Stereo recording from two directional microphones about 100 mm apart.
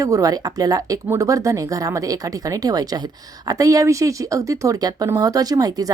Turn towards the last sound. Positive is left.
turn(degrees=-40)  # may be behind; listen again after turning